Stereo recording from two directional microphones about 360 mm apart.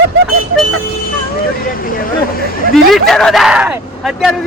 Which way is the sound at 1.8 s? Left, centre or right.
Left.